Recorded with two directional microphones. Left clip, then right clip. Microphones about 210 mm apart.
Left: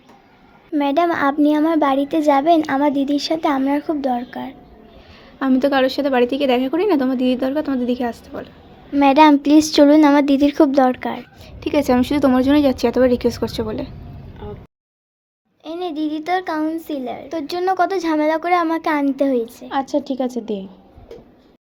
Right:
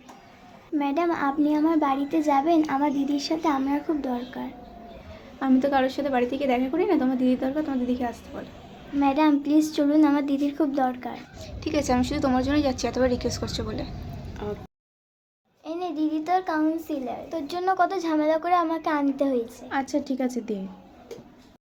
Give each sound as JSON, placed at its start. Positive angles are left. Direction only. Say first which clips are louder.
{"t": 0.7, "sound": "speech", "louder": "left 8 dB", "side_deg": 40}
{"t": 15.6, "sound": "speech", "louder": "left 4 dB", "side_deg": 35}
{"t": 19.6, "sound": "a woman's voice", "louder": "left 6 dB", "side_deg": 15}